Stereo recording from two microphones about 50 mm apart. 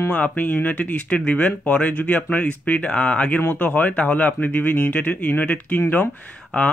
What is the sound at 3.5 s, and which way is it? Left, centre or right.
Speech, left.